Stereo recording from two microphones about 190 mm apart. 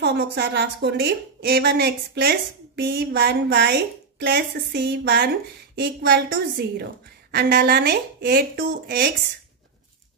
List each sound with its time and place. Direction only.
0.0 s a woman's voice: 65° right (ahead or behind)